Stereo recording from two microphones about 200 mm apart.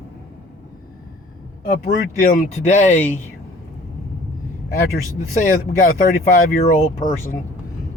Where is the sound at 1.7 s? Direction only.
40° left (ahead or behind).